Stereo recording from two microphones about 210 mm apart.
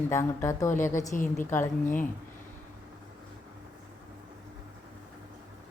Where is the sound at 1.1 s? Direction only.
40° left (ahead or behind).